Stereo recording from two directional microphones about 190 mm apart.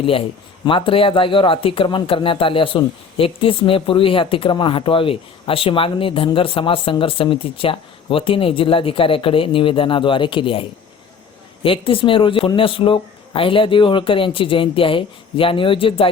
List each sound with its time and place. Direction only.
0.0 s speech: 30° left (ahead or behind)